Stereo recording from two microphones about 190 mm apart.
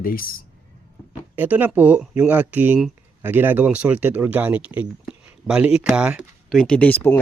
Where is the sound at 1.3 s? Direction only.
10° right (ahead or behind).